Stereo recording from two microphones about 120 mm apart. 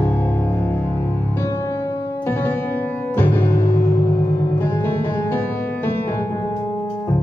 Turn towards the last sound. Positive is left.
turn(degrees=20)  # may be behind; listen again after turning